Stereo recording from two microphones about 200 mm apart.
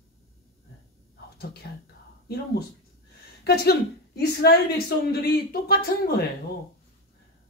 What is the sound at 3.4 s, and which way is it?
Speech, 55° left (ahead or behind).